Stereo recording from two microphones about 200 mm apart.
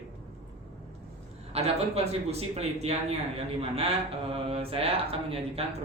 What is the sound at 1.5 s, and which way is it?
A man's voice, 30° right (ahead or behind).